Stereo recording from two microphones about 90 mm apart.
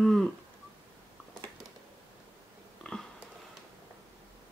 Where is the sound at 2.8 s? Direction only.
10° left (ahead or behind).